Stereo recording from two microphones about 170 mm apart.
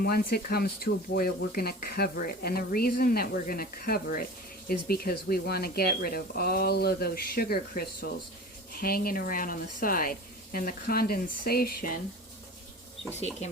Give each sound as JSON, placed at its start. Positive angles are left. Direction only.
{"t": 0.0, "sound": "speech", "side_deg": 65}